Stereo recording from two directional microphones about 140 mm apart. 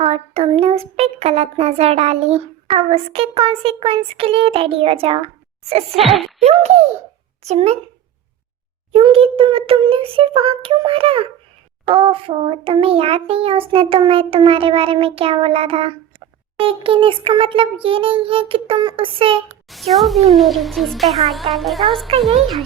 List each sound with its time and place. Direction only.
0.0 s speech: 45° right (ahead or behind)
6.0 s speech: centre (ahead or behind)
6.4 s speech: 50° right (ahead or behind)
8.9 s a child's voice: 40° right (ahead or behind)
19.6 s speech: centre (ahead or behind)